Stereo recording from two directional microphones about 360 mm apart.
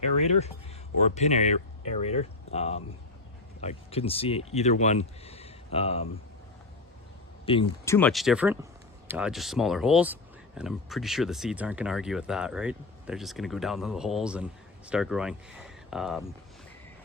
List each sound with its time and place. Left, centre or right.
0.2 s speech: centre
7.4 s speech: centre